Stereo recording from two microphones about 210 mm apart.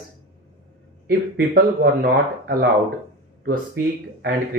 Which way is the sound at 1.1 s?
50° right (ahead or behind).